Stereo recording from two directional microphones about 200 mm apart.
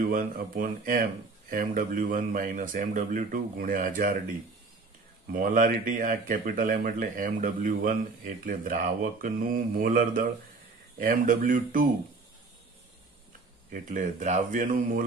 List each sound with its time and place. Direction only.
0.1 s speech: 40° right (ahead or behind)
5.3 s speech: 45° right (ahead or behind)
13.7 s speech: 40° right (ahead or behind)